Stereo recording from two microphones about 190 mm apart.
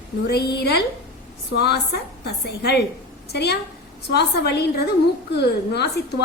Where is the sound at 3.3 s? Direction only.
60° left (ahead or behind).